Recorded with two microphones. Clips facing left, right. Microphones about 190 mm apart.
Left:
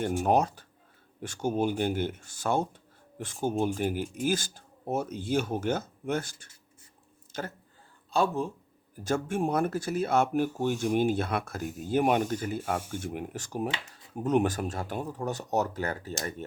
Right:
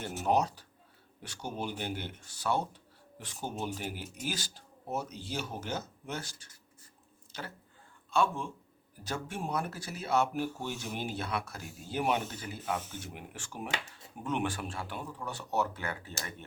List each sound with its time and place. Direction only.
0.3 s speech: 50° left (ahead or behind)
8.1 s speech: 35° left (ahead or behind)
9.0 s speech: 50° left (ahead or behind)